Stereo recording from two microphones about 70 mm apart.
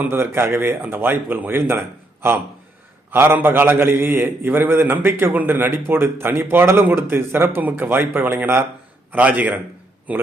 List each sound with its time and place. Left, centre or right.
0.1 s a man's voice: right
3.1 s a man's voice: right